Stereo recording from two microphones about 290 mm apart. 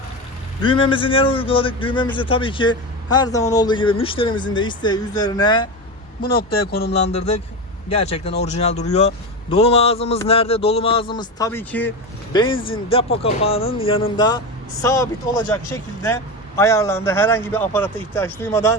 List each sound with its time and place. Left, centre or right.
0.6 s speech: centre
6.7 s speech: left
7.1 s speech: left